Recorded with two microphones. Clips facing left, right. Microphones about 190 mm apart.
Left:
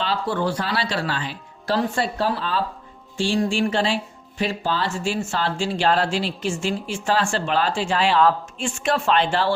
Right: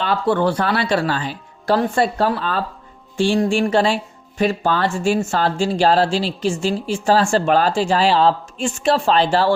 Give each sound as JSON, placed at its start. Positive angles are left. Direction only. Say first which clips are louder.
{"t": 0.0, "sound": "speech", "louder": "right 6 dB", "side_deg": -55}